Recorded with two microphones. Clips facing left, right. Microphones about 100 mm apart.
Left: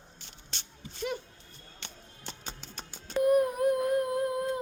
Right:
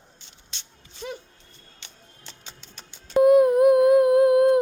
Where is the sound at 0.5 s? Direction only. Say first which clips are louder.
Left 2 dB; 45° left (ahead or behind).